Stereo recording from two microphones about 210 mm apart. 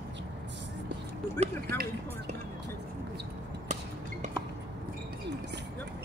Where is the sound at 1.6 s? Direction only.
45° right (ahead or behind).